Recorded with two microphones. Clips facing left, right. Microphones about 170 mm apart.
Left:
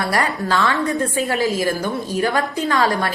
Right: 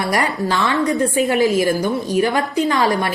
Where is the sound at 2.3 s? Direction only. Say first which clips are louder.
Right 2 dB; 20° right (ahead or behind).